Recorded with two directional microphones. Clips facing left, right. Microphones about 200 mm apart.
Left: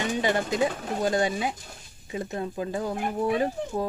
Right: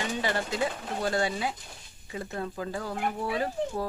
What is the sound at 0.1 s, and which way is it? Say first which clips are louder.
Speech: left 4 dB; 15° left (ahead or behind).